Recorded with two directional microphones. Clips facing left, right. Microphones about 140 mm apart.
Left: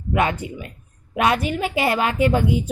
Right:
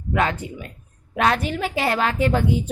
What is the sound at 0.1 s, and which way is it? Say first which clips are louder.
A woman's voice: left 1 dB; 10° left (ahead or behind).